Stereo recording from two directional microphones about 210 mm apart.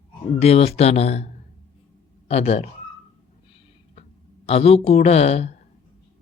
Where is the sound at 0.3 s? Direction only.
30° left (ahead or behind).